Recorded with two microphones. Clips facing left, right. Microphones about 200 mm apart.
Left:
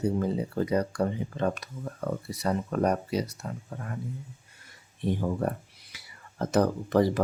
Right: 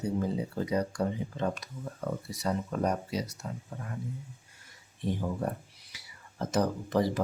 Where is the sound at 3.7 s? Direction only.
70° left (ahead or behind).